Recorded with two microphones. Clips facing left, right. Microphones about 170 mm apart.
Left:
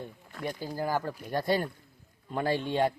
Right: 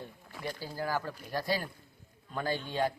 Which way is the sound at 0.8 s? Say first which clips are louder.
Left 3 dB; 15° left (ahead or behind).